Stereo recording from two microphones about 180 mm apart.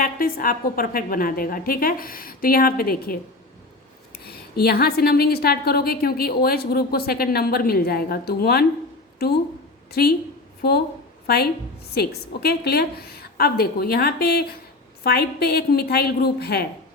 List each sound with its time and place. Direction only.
0.0 s a woman's voice: 55° left (ahead or behind)
11.9 s a woman's voice: 60° left (ahead or behind)